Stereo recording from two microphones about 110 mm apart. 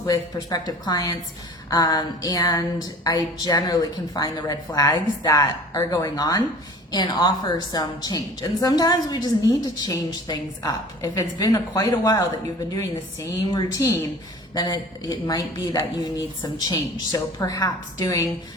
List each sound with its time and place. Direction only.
0.0 s a woman's voice: 35° left (ahead or behind)